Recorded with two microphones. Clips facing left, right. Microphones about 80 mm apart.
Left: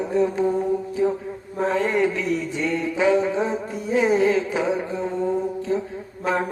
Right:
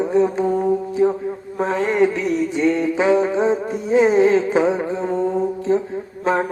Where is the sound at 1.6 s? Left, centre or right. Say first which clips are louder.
Right 3 dB; right.